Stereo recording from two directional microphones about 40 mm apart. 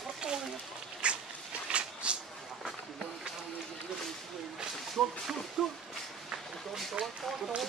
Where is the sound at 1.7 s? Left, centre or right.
Right.